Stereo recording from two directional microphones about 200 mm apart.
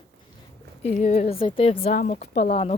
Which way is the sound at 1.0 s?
35° left (ahead or behind).